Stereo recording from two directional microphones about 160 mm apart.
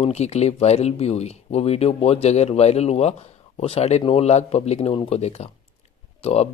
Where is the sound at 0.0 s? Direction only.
40° left (ahead or behind).